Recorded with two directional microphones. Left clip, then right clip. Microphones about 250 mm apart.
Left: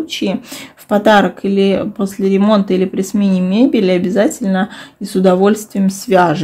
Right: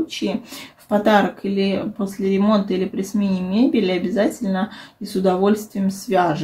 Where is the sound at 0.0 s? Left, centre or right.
Left.